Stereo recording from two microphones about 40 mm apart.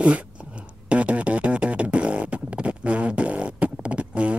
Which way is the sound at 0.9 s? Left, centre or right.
Right.